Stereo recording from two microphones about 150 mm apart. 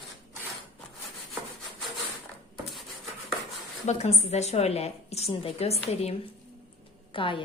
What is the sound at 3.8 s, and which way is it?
A woman's voice, 45° left (ahead or behind).